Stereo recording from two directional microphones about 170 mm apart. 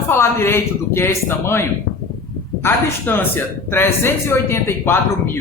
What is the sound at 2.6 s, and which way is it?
Speech, 10° left (ahead or behind).